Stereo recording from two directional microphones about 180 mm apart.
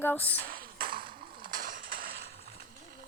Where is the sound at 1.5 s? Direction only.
50° right (ahead or behind).